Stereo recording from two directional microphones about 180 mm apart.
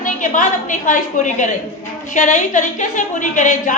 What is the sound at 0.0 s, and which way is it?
A woman's voice, 45° left (ahead or behind).